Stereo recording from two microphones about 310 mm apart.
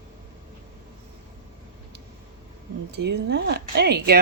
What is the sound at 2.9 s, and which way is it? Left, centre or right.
Speech, right.